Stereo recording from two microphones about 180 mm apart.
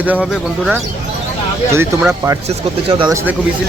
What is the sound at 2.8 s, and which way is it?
Speech, 30° right (ahead or behind).